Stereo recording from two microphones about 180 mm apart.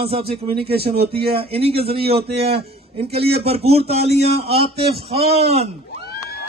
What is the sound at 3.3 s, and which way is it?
Speech, 35° right (ahead or behind).